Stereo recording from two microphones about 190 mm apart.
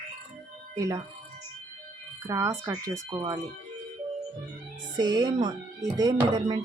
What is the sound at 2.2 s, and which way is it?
Speech, 15° right (ahead or behind).